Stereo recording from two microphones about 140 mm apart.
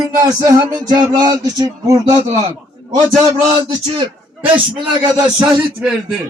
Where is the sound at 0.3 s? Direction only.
25° right (ahead or behind).